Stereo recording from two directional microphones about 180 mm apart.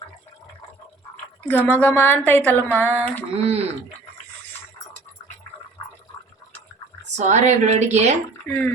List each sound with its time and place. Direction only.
1.5 s a woman's voice: 10° left (ahead or behind)
3.3 s speech: 35° right (ahead or behind)
7.2 s speech: 40° right (ahead or behind)
8.4 s a woman's voice: 10° left (ahead or behind)